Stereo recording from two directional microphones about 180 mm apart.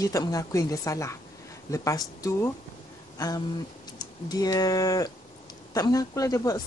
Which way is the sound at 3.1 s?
20° left (ahead or behind).